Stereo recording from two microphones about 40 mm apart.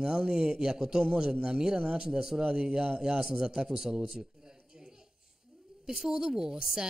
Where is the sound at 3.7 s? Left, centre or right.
Centre.